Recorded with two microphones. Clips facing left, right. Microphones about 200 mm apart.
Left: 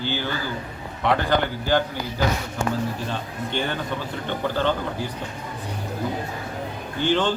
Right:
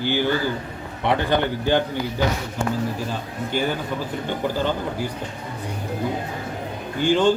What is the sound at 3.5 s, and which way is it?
Speech, 5° right (ahead or behind).